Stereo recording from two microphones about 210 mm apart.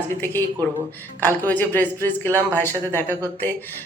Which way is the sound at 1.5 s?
10° left (ahead or behind).